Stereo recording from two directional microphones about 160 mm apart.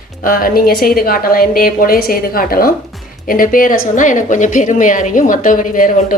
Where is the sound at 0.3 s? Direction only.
60° left (ahead or behind).